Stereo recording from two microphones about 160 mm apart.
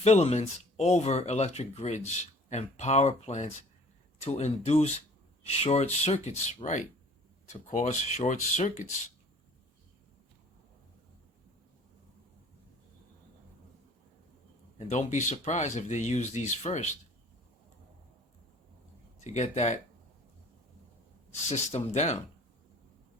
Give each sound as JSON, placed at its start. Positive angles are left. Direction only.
{"t": 0.0, "sound": "speech", "side_deg": 40}
{"t": 14.8, "sound": "speech", "side_deg": 45}
{"t": 19.2, "sound": "speech", "side_deg": 45}
{"t": 21.5, "sound": "speech", "side_deg": 45}